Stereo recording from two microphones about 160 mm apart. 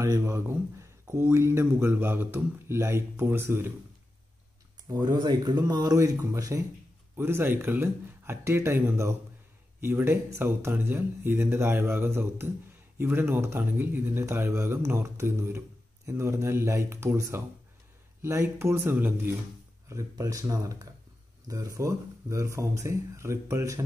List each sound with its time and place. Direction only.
0.0 s a man's voice: 20° right (ahead or behind)
4.8 s a man's voice: 25° right (ahead or behind)